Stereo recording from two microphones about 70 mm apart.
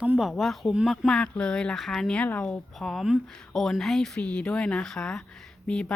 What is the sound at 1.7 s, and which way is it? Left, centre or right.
Speech, centre.